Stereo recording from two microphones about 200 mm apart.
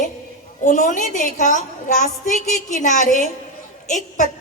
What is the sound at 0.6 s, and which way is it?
A woman's voice, 40° left (ahead or behind).